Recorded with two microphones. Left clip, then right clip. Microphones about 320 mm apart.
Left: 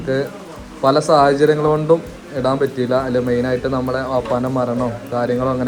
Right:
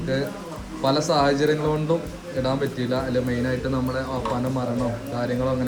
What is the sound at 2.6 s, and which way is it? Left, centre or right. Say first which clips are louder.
Speech: left 8 dB; left.